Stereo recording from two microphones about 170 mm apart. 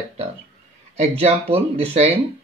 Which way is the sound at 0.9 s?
40° right (ahead or behind).